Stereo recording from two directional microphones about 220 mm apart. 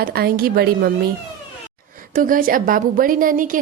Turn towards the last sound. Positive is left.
turn(degrees=-40)  # may be behind; listen again after turning